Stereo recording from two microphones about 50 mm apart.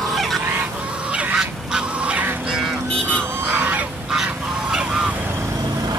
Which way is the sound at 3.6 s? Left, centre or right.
Right.